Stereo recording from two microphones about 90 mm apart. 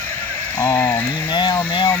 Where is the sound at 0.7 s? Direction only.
40° left (ahead or behind).